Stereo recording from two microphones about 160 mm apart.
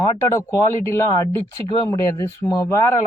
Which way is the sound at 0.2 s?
20° left (ahead or behind).